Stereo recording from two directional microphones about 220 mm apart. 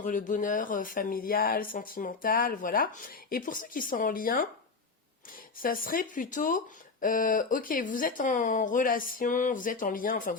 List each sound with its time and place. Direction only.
0.0 s speech: 35° left (ahead or behind)
5.6 s speech: 40° left (ahead or behind)